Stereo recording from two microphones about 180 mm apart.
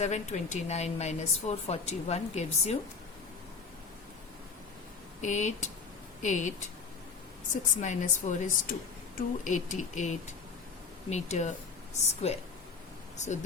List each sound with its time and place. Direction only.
0.0 s a woman's voice: 40° left (ahead or behind)
5.2 s a woman's voice: 40° left (ahead or behind)